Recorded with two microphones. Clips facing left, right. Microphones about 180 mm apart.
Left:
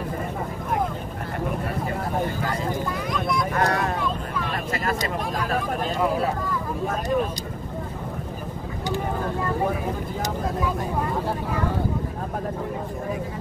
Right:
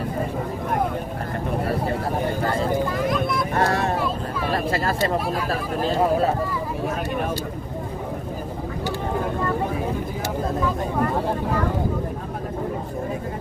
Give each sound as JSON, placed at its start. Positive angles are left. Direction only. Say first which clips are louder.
{"t": 2.9, "sound": "vehicle", "louder": "right 3 dB", "side_deg": 0}
{"t": 3.5, "sound": "a sound", "louder": "right 4 dB", "side_deg": -25}
{"t": 5.5, "sound": "speech", "louder": "right 2 dB", "side_deg": -30}